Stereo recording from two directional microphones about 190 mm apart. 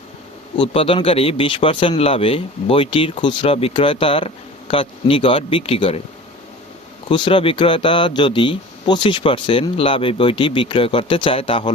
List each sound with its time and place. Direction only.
0.5 s speech: 25° left (ahead or behind)
7.1 s speech: 25° left (ahead or behind)